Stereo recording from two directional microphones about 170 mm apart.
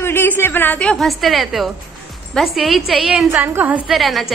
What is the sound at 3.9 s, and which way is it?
Speech, centre (ahead or behind).